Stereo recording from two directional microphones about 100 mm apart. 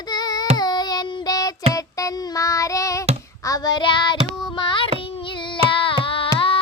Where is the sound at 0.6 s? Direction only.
45° left (ahead or behind).